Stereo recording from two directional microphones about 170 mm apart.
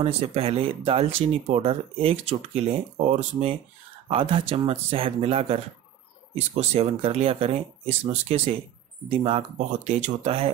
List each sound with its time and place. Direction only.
0.0 s speech: 35° right (ahead or behind)